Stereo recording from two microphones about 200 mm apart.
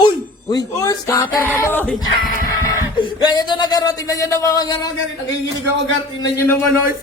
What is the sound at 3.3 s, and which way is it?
Speech, 20° left (ahead or behind).